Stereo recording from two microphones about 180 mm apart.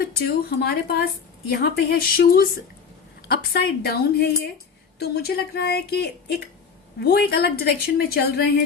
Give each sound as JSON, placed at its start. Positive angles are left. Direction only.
{"t": 0.6, "sound": "a woman's voice", "side_deg": 60}